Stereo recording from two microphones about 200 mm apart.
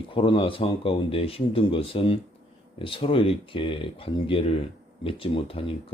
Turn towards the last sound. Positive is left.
turn(degrees=25)  # may be behind; listen again after turning